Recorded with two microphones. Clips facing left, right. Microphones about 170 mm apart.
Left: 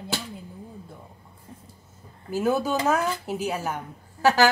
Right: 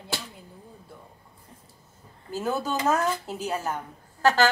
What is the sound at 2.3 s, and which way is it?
A woman's voice, 10° left (ahead or behind).